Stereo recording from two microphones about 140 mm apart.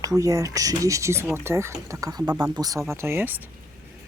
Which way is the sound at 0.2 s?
25° right (ahead or behind).